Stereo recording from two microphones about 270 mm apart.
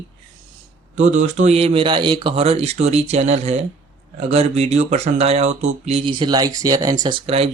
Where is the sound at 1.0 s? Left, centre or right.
Right.